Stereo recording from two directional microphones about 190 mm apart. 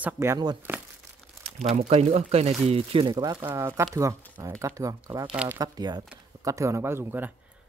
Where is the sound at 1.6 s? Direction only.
35° right (ahead or behind); by 5.2 s 15° right (ahead or behind).